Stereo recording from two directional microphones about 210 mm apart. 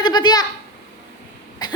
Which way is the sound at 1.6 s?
20° left (ahead or behind).